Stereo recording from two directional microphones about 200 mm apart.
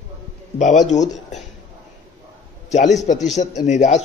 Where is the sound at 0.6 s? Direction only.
35° left (ahead or behind).